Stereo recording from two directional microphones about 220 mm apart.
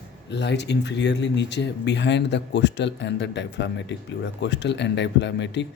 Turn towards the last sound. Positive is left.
turn(degrees=55)  # may be behind; listen again after turning